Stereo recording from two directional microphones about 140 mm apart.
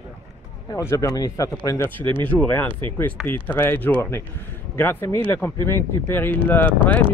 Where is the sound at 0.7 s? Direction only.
25° left (ahead or behind).